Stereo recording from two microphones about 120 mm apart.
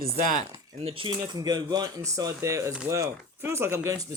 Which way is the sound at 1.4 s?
35° right (ahead or behind).